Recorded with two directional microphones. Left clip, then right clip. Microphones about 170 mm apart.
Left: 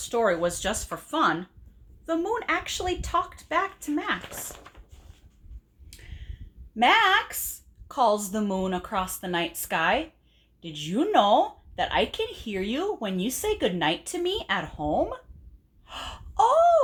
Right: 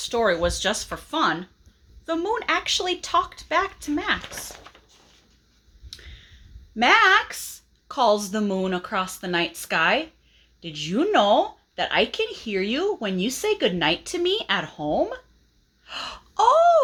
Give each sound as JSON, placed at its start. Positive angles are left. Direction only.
{"t": 0.0, "sound": "speech", "side_deg": -20}
{"t": 4.4, "sound": "speech", "side_deg": 0}
{"t": 6.7, "sound": "speech", "side_deg": -30}
{"t": 15.9, "sound": "gasp", "side_deg": -30}